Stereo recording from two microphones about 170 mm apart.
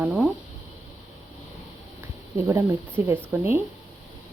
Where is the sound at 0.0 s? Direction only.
5° right (ahead or behind).